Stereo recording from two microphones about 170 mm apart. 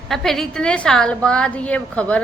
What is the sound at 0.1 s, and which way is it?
A woman's voice, centre (ahead or behind).